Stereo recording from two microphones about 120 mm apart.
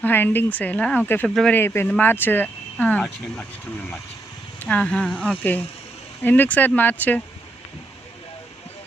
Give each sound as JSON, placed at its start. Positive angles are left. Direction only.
{"t": 0.0, "sound": "speech", "side_deg": 15}
{"t": 4.6, "sound": "speech", "side_deg": 10}